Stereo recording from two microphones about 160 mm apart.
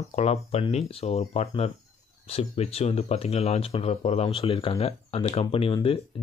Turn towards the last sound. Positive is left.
turn(degrees=35)  # may be behind; listen again after turning